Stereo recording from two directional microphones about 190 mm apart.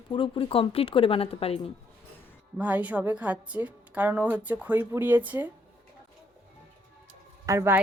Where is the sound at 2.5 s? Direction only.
10° right (ahead or behind).